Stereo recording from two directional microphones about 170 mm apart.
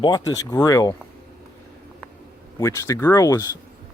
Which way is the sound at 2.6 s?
15° left (ahead or behind).